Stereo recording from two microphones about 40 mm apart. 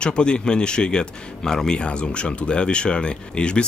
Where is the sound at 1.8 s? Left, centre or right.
Left.